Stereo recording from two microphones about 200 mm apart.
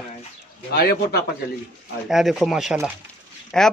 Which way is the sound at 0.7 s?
50° left (ahead or behind).